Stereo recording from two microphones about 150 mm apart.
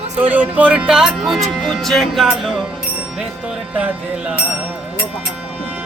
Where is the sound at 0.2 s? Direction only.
10° right (ahead or behind).